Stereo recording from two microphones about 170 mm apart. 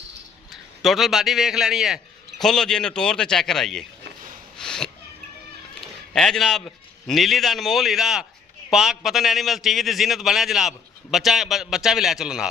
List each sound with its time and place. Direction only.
0.5 s a man's voice: centre (ahead or behind)
4.5 s a sound: 5° left (ahead or behind)
5.8 s a man's voice: 5° left (ahead or behind)